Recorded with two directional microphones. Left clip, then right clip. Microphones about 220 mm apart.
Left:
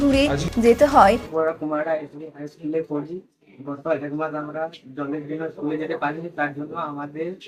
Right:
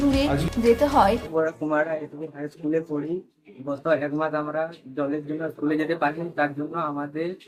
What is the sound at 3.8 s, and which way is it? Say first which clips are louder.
Speech: right 1 dB; 5° right (ahead or behind).